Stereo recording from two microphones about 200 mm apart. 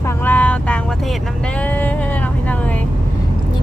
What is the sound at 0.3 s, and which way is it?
Vehicle, 10° left (ahead or behind).